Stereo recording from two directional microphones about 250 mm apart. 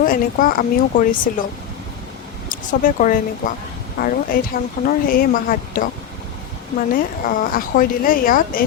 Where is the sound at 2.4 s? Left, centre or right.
Left.